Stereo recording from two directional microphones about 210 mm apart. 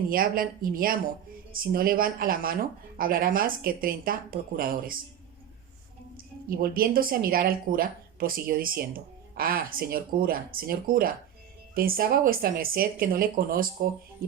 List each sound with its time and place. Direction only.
0.1 s speech: 45° right (ahead or behind)
6.5 s speech: 45° right (ahead or behind)